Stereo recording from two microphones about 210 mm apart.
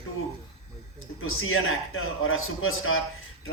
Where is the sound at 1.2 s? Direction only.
75° left (ahead or behind).